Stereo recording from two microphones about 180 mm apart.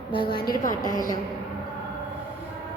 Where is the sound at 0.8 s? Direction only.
20° right (ahead or behind).